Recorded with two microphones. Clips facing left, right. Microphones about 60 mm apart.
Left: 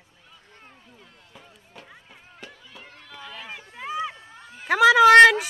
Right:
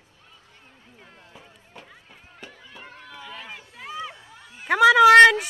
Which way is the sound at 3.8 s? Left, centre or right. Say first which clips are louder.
Left 5 dB; centre.